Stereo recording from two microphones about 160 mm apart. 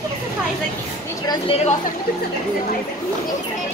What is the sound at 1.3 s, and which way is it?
Speech, 35° left (ahead or behind).